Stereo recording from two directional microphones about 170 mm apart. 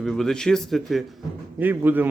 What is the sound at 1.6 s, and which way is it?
Speech, 10° right (ahead or behind).